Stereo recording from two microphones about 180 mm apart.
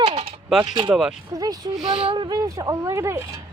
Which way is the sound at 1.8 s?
5° right (ahead or behind).